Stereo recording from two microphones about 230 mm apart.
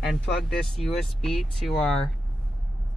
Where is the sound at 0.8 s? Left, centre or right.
Centre.